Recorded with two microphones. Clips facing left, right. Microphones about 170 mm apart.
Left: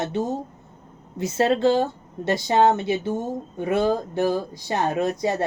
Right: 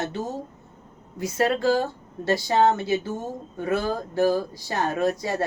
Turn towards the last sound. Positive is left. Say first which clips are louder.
# left 1 dB
turn(degrees=20)  # may be behind; listen again after turning